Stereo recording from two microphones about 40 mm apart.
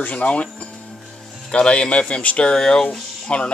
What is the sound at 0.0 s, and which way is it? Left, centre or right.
Speech, left.